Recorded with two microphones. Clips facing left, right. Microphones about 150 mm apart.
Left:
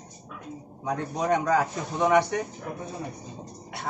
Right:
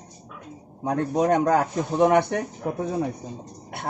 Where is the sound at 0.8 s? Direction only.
55° right (ahead or behind).